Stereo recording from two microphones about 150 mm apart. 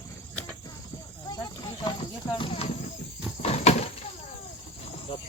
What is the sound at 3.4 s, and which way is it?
Door, 45° left (ahead or behind).